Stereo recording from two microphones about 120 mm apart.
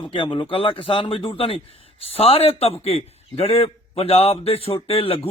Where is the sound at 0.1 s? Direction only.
50° left (ahead or behind).